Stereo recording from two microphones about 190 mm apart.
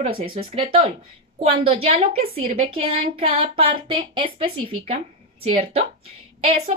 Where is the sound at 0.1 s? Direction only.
30° right (ahead or behind).